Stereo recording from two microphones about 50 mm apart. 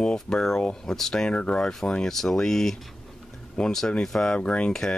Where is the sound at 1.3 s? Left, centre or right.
Left.